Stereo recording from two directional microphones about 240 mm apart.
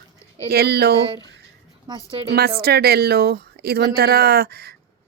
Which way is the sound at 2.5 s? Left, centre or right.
Right.